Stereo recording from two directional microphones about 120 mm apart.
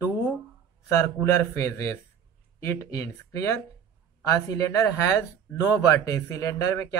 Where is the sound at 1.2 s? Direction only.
20° left (ahead or behind).